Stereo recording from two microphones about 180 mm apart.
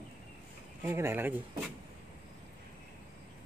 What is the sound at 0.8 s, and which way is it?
Speech, 15° right (ahead or behind).